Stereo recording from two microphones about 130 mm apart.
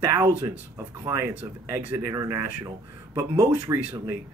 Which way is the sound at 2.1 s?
25° right (ahead or behind).